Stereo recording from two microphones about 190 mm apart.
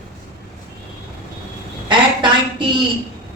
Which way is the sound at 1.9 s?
25° right (ahead or behind).